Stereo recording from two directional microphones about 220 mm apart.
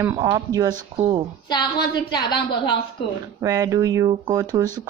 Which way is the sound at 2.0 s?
20° left (ahead or behind).